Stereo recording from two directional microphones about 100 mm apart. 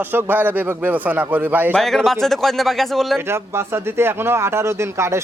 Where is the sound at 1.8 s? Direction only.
5° left (ahead or behind).